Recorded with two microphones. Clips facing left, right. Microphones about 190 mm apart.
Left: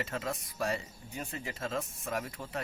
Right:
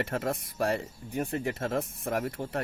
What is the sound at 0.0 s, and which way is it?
Speech, 55° right (ahead or behind).